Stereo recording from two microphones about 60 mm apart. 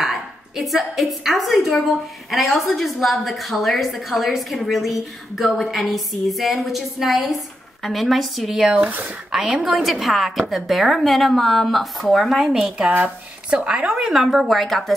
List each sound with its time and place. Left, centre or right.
0.0 s a woman's voice: centre
8.7 s speech: right
9.3 s a woman's voice: centre
12.4 s speech: centre
12.9 s a woman's voice: right; by 15.0 s centre